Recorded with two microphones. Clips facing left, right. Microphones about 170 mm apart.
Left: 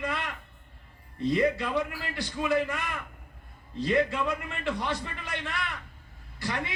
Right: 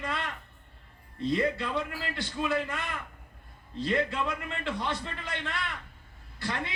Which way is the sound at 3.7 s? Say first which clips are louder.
Left 3 dB; 20° left (ahead or behind).